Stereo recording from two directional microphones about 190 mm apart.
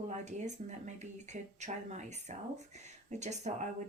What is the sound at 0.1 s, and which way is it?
Speech, 40° right (ahead or behind).